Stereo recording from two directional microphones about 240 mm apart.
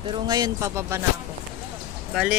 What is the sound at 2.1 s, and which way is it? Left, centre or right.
Speech, centre.